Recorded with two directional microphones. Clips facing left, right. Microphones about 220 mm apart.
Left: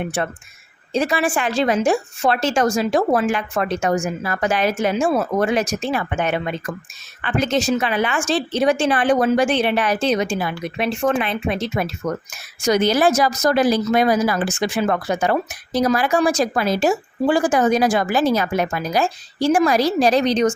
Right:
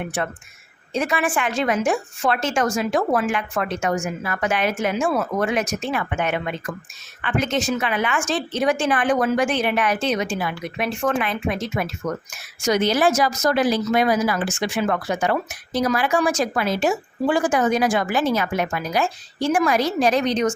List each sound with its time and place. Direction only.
0.0 s speech: 30° left (ahead or behind)